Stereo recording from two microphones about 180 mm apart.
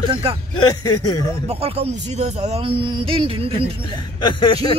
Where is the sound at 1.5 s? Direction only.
35° right (ahead or behind).